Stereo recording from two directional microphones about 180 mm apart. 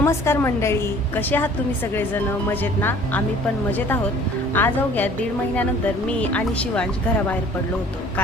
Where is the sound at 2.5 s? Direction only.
10° left (ahead or behind).